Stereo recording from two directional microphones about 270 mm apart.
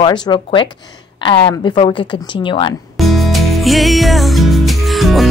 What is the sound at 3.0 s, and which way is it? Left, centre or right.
Music, centre.